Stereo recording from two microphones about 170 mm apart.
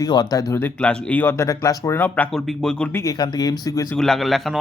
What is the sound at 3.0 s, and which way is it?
Speech, 25° left (ahead or behind).